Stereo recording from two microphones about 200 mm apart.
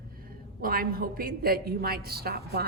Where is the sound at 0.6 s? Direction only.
45° right (ahead or behind).